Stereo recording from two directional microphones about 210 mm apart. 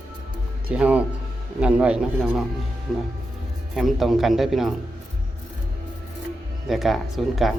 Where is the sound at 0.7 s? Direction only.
5° right (ahead or behind).